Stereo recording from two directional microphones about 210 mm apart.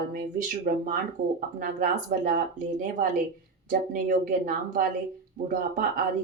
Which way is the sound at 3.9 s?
40° right (ahead or behind).